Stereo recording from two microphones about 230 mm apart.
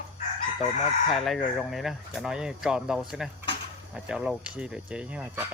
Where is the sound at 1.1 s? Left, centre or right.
Centre.